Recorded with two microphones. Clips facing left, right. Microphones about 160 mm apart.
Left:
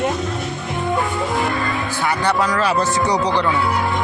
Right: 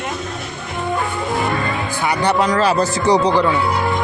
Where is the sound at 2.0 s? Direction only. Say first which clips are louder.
Right 2 dB; 20° right (ahead or behind).